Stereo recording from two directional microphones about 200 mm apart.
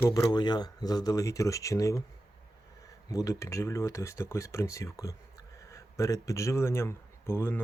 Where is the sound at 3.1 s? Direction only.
15° left (ahead or behind).